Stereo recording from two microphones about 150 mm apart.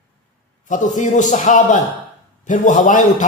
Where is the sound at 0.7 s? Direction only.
55° left (ahead or behind).